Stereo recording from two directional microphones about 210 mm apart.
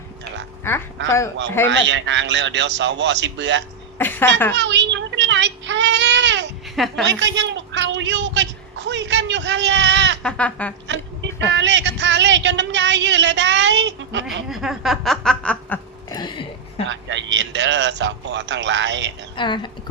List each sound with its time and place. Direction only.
0.7 s speech: 10° left (ahead or behind)
1.7 s speech: 60° right (ahead or behind)
3.9 s speech: 10° left (ahead or behind)
4.5 s child singing: 55° right (ahead or behind)
6.7 s snicker: centre (ahead or behind)
7.1 s a sound: 60° right (ahead or behind)
10.2 s snicker: 5° left (ahead or behind)
10.8 s a sound: 60° right (ahead or behind)
11.5 s speech: 60° right (ahead or behind)
14.3 s snicker: centre (ahead or behind)
16.0 s music: 20° left (ahead or behind)
16.9 s speech: 60° right (ahead or behind)
19.4 s speech: 20° left (ahead or behind)